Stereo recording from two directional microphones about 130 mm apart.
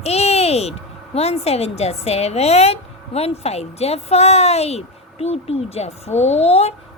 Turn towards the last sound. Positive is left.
turn(degrees=50)  # may be behind; listen again after turning